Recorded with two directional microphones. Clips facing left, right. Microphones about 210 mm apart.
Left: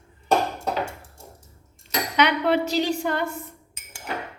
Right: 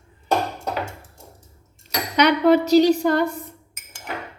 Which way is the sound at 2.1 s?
40° right (ahead or behind).